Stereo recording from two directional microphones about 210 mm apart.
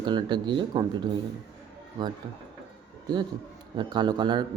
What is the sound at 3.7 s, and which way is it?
Speech, 20° right (ahead or behind).